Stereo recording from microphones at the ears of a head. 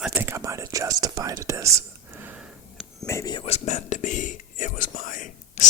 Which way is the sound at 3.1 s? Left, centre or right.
Left.